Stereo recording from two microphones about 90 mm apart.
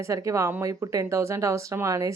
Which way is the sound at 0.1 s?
35° right (ahead or behind).